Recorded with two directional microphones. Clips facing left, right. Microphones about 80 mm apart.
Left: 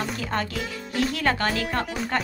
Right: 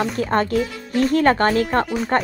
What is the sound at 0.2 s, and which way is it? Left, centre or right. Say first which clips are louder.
Speech: right 9 dB; right.